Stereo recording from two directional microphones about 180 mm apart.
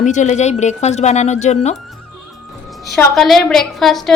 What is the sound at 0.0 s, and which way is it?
Speech, 40° left (ahead or behind).